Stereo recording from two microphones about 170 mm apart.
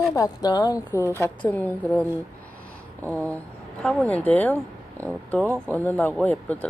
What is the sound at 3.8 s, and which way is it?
Speech, 5° left (ahead or behind).